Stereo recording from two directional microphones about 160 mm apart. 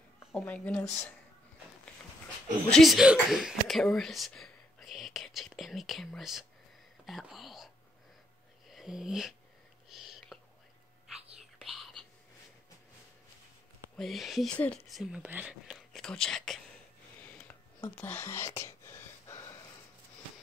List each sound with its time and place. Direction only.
0.3 s speech: 5° left (ahead or behind)
2.7 s speech: centre (ahead or behind)
7.1 s whispering: centre (ahead or behind)
8.6 s speech: centre (ahead or behind)
9.8 s a sound: centre (ahead or behind)
11.6 s whispering: centre (ahead or behind)
13.9 s speech: centre (ahead or behind)
15.7 s speech: centre (ahead or behind)
17.4 s whispering: 15° left (ahead or behind)